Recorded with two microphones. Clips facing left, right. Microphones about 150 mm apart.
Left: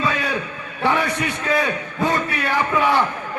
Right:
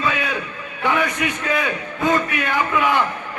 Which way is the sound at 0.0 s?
35° left (ahead or behind).